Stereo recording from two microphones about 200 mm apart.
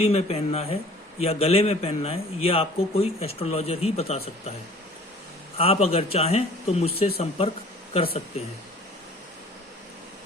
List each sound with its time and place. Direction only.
0.0 s a man's voice: 30° left (ahead or behind)
5.5 s a man's voice: 30° left (ahead or behind)